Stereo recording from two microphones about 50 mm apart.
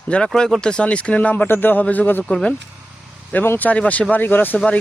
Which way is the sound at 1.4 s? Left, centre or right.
Left.